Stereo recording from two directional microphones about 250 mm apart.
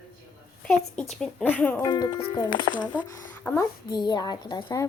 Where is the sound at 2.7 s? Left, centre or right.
Left.